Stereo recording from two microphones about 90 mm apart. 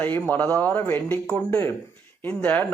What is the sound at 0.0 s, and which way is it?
Speech, 20° left (ahead or behind).